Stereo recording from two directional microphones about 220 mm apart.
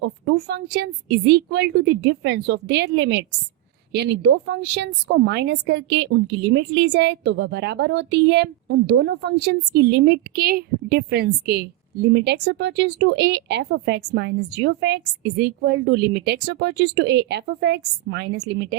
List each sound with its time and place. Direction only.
0.0 s speech: 50° right (ahead or behind)